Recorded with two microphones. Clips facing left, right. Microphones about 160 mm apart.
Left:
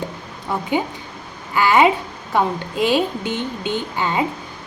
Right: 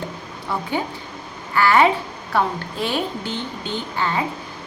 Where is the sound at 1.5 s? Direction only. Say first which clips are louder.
Left 1 dB; 15° left (ahead or behind).